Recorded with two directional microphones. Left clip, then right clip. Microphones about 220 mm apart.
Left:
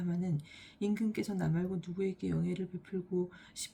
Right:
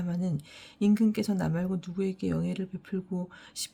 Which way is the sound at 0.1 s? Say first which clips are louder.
Right 4 dB; 50° right (ahead or behind).